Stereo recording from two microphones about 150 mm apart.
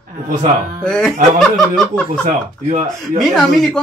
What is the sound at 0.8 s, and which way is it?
A man's voice, 5° left (ahead or behind).